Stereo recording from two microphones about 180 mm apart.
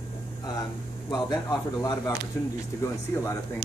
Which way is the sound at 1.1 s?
20° left (ahead or behind).